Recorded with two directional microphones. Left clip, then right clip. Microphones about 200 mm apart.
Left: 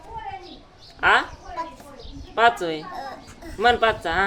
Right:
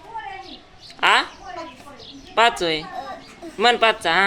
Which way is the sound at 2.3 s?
20° right (ahead or behind).